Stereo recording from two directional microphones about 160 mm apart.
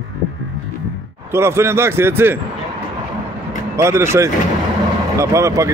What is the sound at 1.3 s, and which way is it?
Speech, 15° right (ahead or behind).